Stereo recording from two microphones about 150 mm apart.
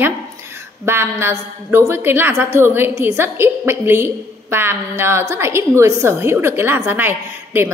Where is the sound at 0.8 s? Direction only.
15° right (ahead or behind).